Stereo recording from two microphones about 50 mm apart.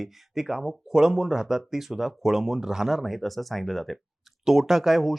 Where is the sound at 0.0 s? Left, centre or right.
Centre.